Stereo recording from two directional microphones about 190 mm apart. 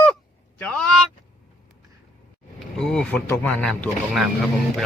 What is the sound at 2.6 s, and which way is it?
Speech, centre (ahead or behind).